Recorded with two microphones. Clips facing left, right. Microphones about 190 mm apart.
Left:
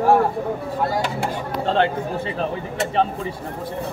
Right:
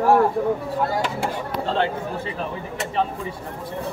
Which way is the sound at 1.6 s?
65° left (ahead or behind).